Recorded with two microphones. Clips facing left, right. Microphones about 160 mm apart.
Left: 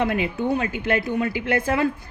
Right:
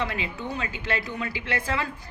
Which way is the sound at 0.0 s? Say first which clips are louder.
Left 8 dB; 55° left (ahead or behind).